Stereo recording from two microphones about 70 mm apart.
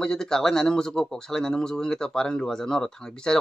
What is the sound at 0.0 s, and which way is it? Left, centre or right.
A man's voice, centre.